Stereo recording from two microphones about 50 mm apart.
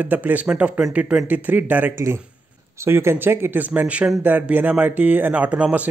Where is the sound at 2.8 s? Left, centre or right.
Right.